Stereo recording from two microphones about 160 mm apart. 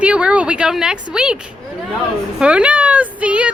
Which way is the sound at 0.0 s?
5° right (ahead or behind).